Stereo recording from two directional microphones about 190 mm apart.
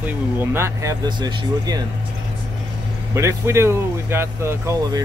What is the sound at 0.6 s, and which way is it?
Speech, 15° right (ahead or behind).